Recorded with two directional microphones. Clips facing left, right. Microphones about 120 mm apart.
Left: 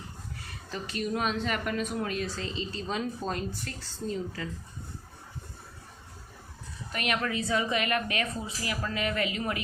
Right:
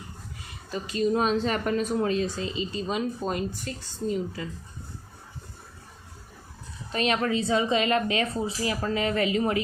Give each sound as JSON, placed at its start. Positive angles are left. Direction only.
{"t": 0.7, "sound": "speech", "side_deg": -15}
{"t": 1.0, "sound": "speech", "side_deg": -30}
{"t": 2.3, "sound": "speech", "side_deg": -15}
{"t": 6.9, "sound": "speech", "side_deg": -30}